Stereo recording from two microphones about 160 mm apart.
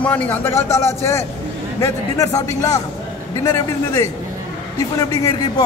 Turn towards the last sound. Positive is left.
turn(degrees=25)  # may be behind; listen again after turning